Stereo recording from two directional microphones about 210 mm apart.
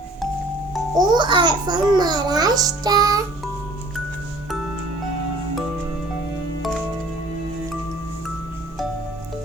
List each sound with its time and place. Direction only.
0.9 s a child's voice: 20° right (ahead or behind)